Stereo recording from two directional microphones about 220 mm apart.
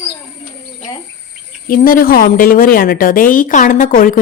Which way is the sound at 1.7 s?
40° left (ahead or behind).